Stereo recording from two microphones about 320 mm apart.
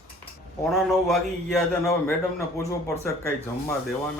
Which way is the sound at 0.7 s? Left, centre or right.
Centre.